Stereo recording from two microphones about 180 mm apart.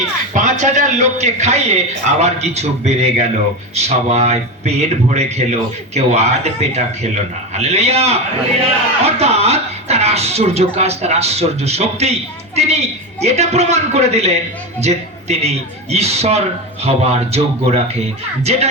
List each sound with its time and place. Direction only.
0.3 s speech: 40° right (ahead or behind)